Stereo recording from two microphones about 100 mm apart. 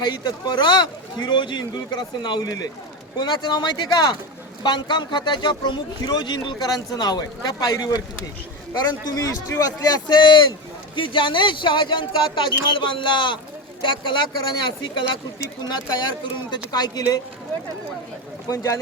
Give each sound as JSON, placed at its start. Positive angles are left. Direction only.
{"t": 0.0, "sound": "a man's voice", "side_deg": 45}
{"t": 18.4, "sound": "a man's voice", "side_deg": 30}